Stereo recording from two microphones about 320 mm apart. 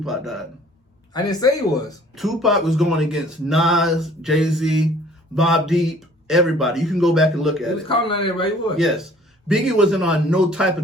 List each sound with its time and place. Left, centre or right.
0.0 s speech: centre
1.1 s a man's voice: centre
2.1 s speech: centre
7.9 s a man's voice: centre
8.8 s speech: centre